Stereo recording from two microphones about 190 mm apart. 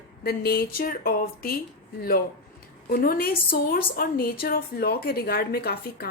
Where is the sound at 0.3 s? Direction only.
55° left (ahead or behind).